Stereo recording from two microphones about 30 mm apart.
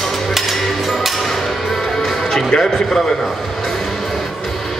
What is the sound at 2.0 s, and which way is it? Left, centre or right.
Music, centre.